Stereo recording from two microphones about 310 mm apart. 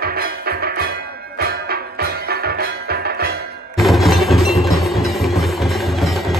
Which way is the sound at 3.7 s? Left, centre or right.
Centre.